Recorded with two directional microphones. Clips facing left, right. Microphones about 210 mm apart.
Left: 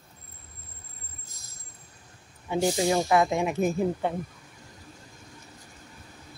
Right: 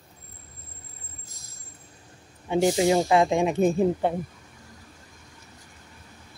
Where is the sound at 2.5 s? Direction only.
20° right (ahead or behind).